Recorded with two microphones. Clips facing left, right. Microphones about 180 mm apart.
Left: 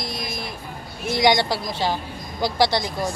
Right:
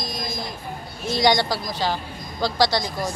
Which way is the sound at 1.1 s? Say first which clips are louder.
Left 1 dB; 20° left (ahead or behind).